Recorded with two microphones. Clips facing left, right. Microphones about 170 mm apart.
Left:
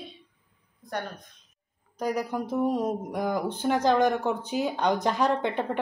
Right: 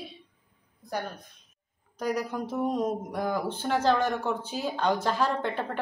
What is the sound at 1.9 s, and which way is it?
Speech, 10° left (ahead or behind).